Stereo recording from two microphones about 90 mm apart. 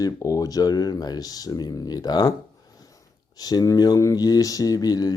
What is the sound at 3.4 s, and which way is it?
Speech, 45° left (ahead or behind).